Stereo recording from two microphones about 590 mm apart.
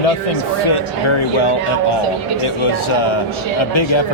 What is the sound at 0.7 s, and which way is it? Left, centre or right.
Speech, left.